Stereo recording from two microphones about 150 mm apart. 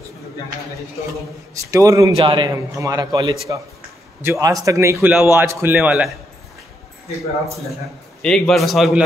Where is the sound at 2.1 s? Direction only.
35° right (ahead or behind); by 6.1 s 10° right (ahead or behind).